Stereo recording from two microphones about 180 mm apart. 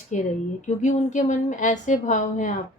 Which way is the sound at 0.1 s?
40° left (ahead or behind).